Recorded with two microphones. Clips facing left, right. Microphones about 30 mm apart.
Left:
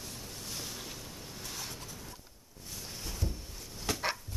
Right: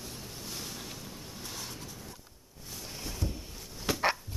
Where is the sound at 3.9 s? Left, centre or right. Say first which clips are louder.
Right 3 dB; centre.